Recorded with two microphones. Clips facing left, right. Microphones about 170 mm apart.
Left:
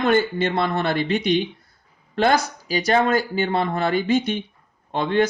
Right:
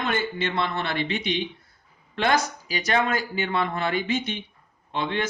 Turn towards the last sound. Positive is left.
turn(degrees=40)  # may be behind; listen again after turning